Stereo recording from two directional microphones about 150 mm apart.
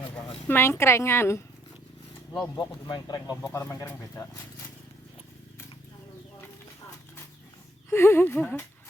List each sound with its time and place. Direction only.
0.4 s a woman's voice: 15° left (ahead or behind)
2.6 s speech: 30° left (ahead or behind)
3.5 s a woman's voice: 15° left (ahead or behind)
7.9 s a woman's voice: 15° left (ahead or behind)